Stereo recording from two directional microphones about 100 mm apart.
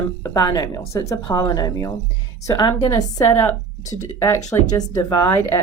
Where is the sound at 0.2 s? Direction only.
40° left (ahead or behind).